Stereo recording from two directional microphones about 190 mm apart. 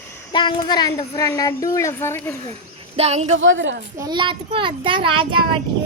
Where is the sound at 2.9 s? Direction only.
35° right (ahead or behind).